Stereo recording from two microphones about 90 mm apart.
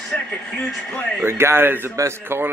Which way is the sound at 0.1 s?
15° left (ahead or behind).